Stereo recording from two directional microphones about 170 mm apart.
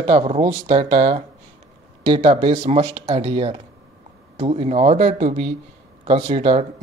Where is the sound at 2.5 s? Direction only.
40° right (ahead or behind).